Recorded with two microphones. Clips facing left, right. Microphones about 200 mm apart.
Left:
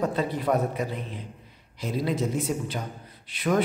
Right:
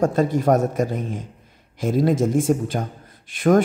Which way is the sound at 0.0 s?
45° right (ahead or behind).